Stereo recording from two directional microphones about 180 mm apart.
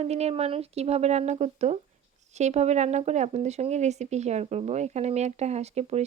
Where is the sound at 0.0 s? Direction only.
35° right (ahead or behind).